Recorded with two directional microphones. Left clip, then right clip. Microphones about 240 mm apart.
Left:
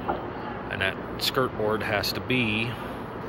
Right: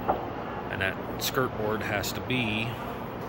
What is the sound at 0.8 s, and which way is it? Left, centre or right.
Speech, centre.